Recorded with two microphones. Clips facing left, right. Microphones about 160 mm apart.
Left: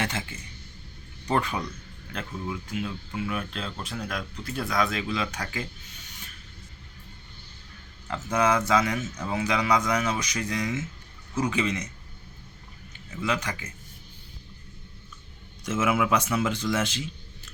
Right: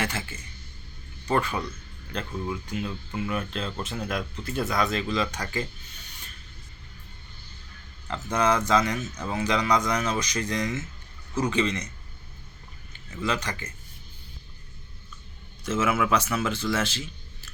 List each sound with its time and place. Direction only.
0.0 s speech: 20° left (ahead or behind)
2.1 s speech: centre (ahead or behind)
8.0 s speech: 10° left (ahead or behind)
13.2 s speech: 10° left (ahead or behind)
15.6 s speech: 10° left (ahead or behind)